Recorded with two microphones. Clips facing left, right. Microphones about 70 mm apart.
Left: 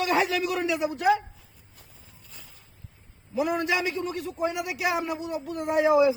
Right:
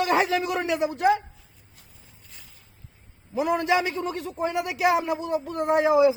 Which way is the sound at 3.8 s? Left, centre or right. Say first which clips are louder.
Right 1 dB; right.